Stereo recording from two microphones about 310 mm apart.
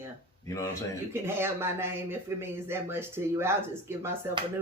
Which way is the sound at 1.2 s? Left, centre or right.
Centre.